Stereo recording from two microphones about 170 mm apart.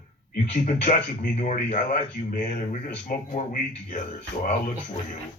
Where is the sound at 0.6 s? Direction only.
50° left (ahead or behind).